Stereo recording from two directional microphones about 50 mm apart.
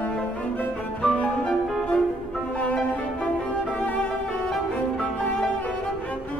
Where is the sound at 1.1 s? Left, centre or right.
Left.